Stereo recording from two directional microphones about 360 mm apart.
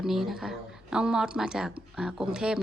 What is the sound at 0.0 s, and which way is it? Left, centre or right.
A woman's voice, centre.